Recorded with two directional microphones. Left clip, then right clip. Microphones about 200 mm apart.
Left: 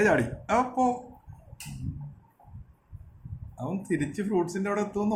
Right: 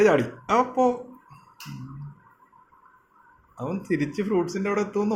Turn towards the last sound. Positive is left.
turn(degrees=-5)  # may be behind; listen again after turning